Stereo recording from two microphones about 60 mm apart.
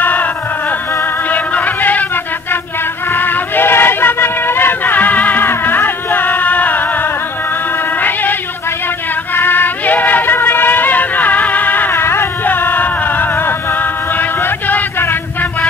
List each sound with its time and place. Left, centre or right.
0.0 s music: left
3.1 s a sound: left
8.0 s music: left
14.1 s chant: left